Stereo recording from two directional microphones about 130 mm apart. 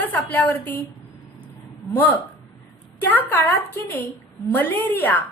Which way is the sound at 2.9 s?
15° left (ahead or behind).